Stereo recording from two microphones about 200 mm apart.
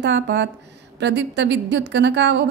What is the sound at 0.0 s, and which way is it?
A woman's voice, 65° right (ahead or behind).